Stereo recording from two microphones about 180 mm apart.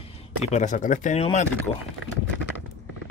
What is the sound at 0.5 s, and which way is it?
Speech, 40° left (ahead or behind).